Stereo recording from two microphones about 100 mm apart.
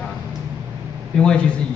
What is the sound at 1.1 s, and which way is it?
Speech, 10° left (ahead or behind).